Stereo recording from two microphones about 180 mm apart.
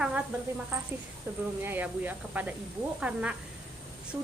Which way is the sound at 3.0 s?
5° right (ahead or behind).